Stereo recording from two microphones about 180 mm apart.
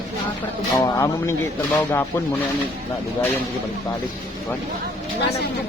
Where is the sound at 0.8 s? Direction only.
15° left (ahead or behind).